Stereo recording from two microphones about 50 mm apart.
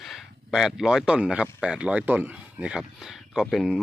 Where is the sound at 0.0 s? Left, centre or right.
Centre; by 2.3 s right.